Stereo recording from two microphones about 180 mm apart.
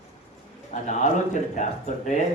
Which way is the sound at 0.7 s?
40° left (ahead or behind).